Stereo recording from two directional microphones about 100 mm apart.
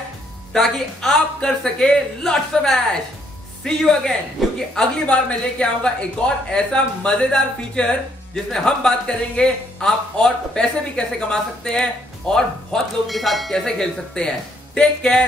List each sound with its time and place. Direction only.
0.5 s a man's voice: 5° left (ahead or behind)